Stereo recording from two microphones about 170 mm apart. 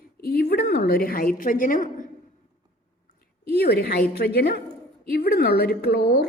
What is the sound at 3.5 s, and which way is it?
A woman's voice, 70° left (ahead or behind).